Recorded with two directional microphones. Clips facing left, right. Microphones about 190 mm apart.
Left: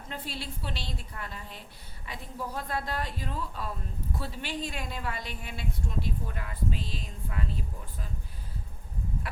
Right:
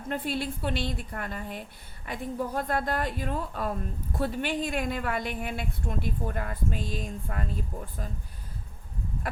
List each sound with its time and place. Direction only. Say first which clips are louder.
0.1 s a woman's voice: right 9 dB; 55° right (ahead or behind)